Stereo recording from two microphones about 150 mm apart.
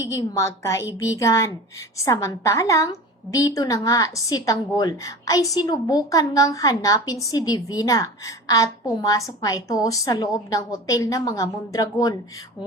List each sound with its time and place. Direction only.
0.1 s a woman's voice: 20° left (ahead or behind)